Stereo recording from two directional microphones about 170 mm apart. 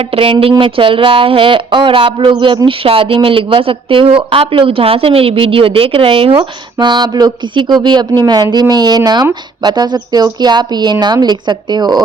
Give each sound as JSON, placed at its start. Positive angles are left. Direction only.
{"t": 0.2, "sound": "speech", "side_deg": -30}